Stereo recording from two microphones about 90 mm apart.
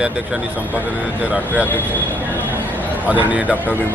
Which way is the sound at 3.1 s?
15° right (ahead or behind).